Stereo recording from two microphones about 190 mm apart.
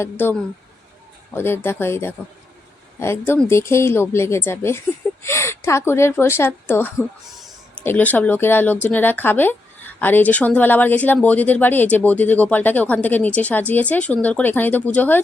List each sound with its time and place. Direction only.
0.0 s a woman's voice: 10° left (ahead or behind)